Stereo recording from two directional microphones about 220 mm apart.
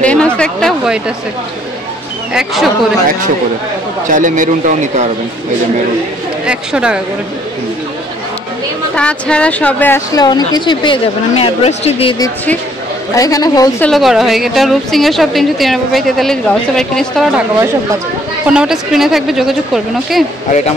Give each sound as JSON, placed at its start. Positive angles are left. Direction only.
{"t": 0.0, "sound": "a sound", "side_deg": 5}
{"t": 2.3, "sound": "a woman's voice", "side_deg": 0}
{"t": 4.1, "sound": "a man's voice", "side_deg": -35}
{"t": 6.4, "sound": "a woman's voice", "side_deg": -5}
{"t": 8.9, "sound": "speech", "side_deg": 5}
{"t": 13.8, "sound": "a woman's voice", "side_deg": 0}
{"t": 18.5, "sound": "a woman's voice", "side_deg": -5}